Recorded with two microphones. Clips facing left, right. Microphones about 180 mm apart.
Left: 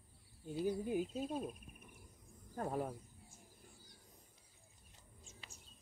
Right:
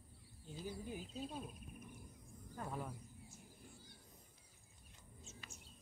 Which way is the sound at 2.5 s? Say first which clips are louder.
Left 7 dB; 45° left (ahead or behind).